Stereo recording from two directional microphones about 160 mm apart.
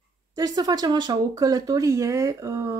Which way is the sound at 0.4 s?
25° right (ahead or behind).